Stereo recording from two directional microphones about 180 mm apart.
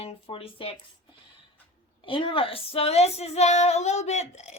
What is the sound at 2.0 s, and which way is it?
Speech, 30° left (ahead or behind).